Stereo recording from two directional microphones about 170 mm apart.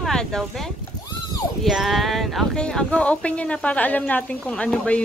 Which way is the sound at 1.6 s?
Centre (ahead or behind).